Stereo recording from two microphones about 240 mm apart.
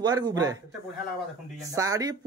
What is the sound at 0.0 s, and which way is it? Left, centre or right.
Speech, centre.